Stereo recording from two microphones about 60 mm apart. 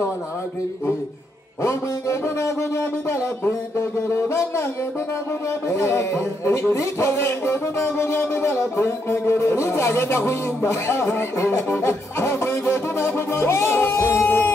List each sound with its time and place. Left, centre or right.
1.6 s speech: left
5.7 s speech: left
7.1 s speech: left